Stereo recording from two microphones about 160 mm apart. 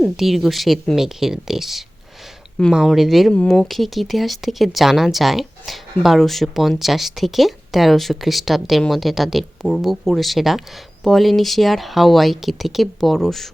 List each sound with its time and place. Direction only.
0.0 s speech: centre (ahead or behind)